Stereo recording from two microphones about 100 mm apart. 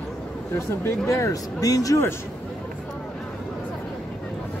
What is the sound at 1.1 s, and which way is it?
Speech, 35° left (ahead or behind).